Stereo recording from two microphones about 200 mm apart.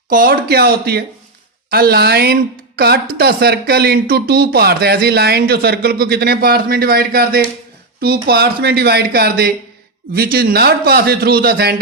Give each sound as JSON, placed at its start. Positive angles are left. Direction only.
{"t": 0.1, "sound": "speech", "side_deg": -45}